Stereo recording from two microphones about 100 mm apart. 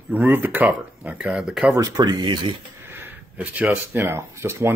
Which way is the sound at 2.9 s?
20° right (ahead or behind).